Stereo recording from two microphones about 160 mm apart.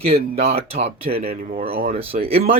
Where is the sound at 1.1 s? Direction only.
70° right (ahead or behind).